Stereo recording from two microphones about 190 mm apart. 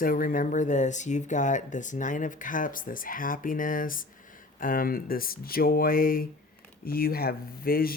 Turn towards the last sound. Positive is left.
turn(degrees=50)  # may be behind; listen again after turning